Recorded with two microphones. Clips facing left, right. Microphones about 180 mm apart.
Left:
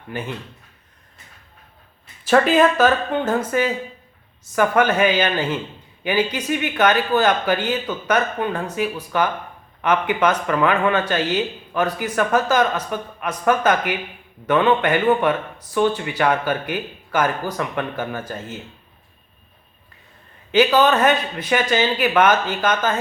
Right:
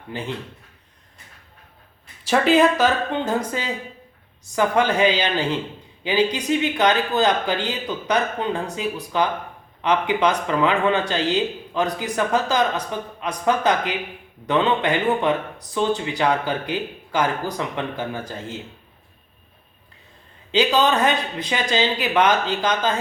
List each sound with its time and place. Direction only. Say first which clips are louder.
2.2 s speech: left 1 dB; 15° right (ahead or behind)
20.5 s speech: left 3 dB; 15° right (ahead or behind)